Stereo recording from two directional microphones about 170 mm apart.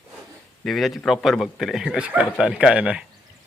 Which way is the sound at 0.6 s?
Centre (ahead or behind).